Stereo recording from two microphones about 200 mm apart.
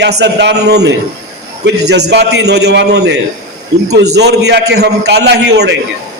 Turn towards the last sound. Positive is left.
turn(degrees=-55)  # may be behind; listen again after turning